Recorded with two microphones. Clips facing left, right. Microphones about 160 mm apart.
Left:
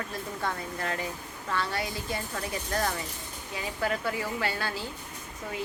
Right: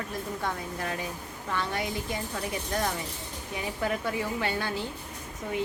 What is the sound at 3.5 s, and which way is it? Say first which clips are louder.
A woman's voice: even; 20° right (ahead or behind).